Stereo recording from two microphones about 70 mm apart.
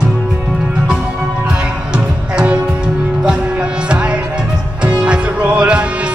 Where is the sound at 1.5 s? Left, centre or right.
Centre.